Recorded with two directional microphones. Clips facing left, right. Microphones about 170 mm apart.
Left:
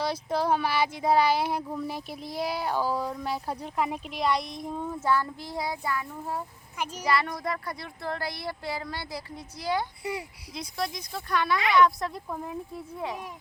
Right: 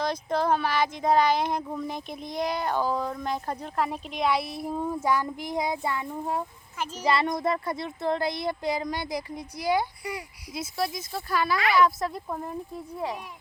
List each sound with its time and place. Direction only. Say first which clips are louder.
0.0 s speech: right 1 dB; 10° left (ahead or behind); by 9.8 s 10° right (ahead or behind)
10.0 s speech: left 2 dB; 25° left (ahead or behind)
10.5 s a child's voice: right 3 dB; 5° right (ahead or behind)